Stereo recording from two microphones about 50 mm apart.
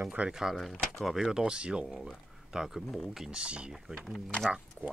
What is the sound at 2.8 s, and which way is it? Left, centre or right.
Speech, centre.